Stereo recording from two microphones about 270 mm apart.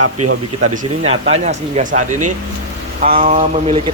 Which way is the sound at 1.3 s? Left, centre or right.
Right.